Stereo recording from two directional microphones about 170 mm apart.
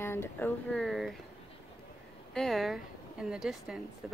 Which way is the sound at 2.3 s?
Centre (ahead or behind).